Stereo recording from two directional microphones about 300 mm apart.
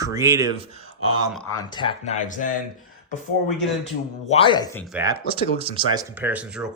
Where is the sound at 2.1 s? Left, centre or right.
Left.